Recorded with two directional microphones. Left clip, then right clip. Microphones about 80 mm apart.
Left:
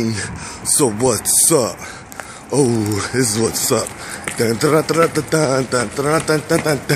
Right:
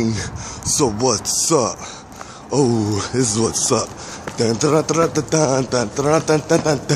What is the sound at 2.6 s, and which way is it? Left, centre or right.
Speech, centre.